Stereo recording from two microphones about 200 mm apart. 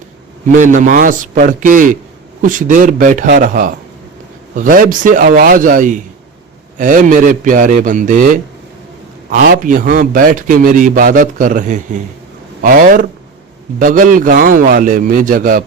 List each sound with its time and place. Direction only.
0.5 s a man's voice: 40° right (ahead or behind)
9.3 s a man's voice: 45° right (ahead or behind)